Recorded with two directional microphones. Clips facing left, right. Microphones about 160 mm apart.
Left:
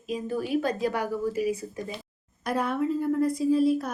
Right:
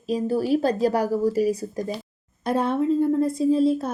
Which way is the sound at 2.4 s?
25° right (ahead or behind).